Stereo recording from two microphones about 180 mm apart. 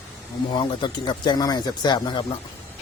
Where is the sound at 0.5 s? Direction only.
25° left (ahead or behind).